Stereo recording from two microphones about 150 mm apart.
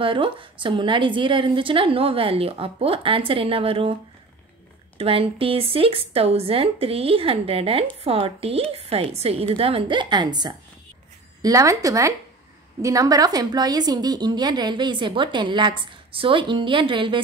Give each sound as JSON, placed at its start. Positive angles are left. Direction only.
{"t": 0.0, "sound": "a woman's voice", "side_deg": -35}
{"t": 4.9, "sound": "a woman's voice", "side_deg": -40}